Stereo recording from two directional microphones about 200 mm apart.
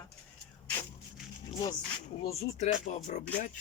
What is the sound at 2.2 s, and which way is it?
Speech, 30° left (ahead or behind).